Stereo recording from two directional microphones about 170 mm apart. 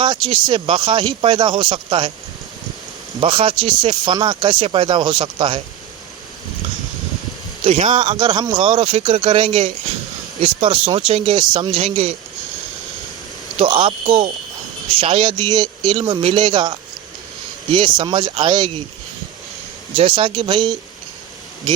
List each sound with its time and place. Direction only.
0.0 s speech: 25° right (ahead or behind)
3.2 s speech: 35° right (ahead or behind)
7.9 s speech: 30° right (ahead or behind)
13.6 s speech: 30° right (ahead or behind)
20.0 s speech: 30° right (ahead or behind)